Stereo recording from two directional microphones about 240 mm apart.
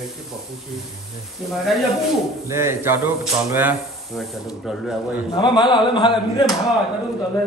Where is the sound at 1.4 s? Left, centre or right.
Centre.